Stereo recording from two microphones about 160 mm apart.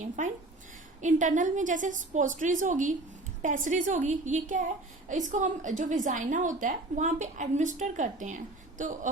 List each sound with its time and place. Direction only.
0.2 s a woman's voice: 50° right (ahead or behind)